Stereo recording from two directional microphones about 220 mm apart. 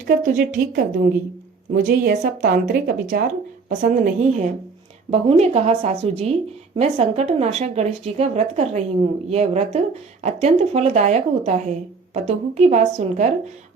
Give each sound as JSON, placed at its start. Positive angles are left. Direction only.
{"t": 0.0, "sound": "speech", "side_deg": -40}